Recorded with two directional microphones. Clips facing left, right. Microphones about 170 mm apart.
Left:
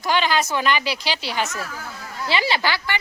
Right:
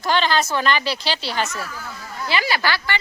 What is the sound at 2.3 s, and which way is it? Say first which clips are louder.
Speech: even; 25° left (ahead or behind).